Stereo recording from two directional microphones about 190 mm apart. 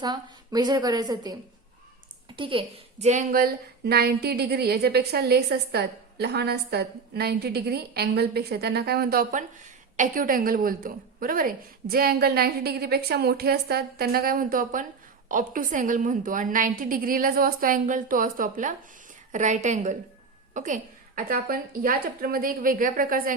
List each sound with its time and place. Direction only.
0.0 s a woman's voice: 20° right (ahead or behind); by 23.3 s 45° right (ahead or behind)